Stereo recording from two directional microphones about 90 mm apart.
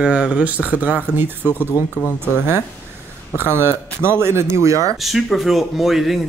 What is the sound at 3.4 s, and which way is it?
A man's voice, 25° right (ahead or behind).